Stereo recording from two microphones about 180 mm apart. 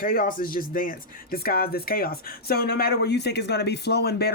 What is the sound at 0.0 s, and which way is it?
Speech, 50° left (ahead or behind).